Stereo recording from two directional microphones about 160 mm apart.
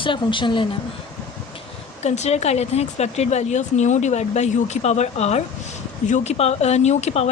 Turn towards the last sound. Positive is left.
turn(degrees=40)  # may be behind; listen again after turning